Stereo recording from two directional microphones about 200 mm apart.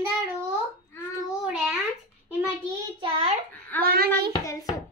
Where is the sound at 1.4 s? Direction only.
5° right (ahead or behind).